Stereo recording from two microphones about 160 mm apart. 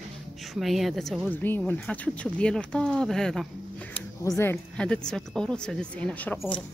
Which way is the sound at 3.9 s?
15° left (ahead or behind).